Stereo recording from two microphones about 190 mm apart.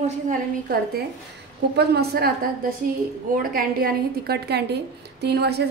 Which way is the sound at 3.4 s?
50° right (ahead or behind).